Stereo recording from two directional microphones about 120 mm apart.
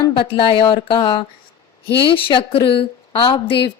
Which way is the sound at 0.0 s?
45° left (ahead or behind).